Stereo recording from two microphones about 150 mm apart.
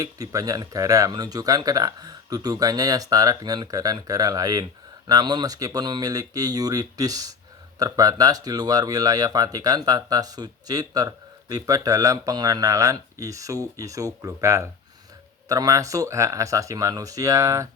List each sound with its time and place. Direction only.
0.0 s speech: 20° right (ahead or behind)